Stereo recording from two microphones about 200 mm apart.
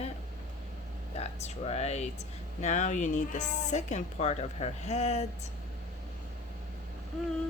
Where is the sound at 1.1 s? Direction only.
30° left (ahead or behind).